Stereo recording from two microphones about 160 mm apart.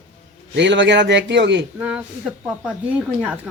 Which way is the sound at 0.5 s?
90° right.